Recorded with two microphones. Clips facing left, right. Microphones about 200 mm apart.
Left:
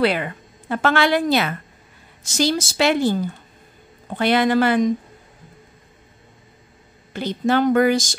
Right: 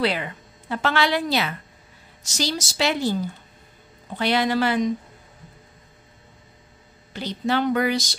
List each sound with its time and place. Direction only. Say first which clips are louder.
0.0 s speech: left 4 dB; 55° left (ahead or behind)
7.1 s speech: left 4 dB; 50° left (ahead or behind)